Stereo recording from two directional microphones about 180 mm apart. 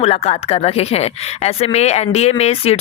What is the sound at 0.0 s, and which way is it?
Speech, 35° left (ahead or behind).